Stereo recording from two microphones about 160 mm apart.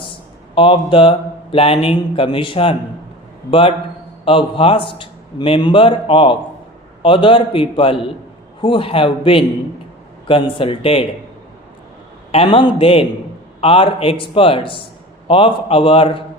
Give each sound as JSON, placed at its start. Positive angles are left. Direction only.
{"t": 0.5, "sound": "speech", "side_deg": 30}
{"t": 12.3, "sound": "speech", "side_deg": 35}